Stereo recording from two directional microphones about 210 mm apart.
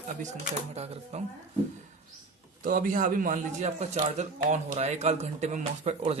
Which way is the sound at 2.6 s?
40° right (ahead or behind).